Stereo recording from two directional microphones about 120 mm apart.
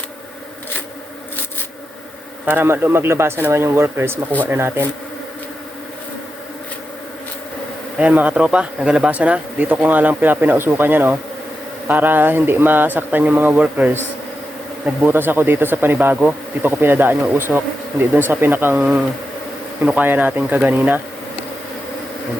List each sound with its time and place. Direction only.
2.5 s speech: 15° right (ahead or behind)
7.9 s speech: 10° right (ahead or behind)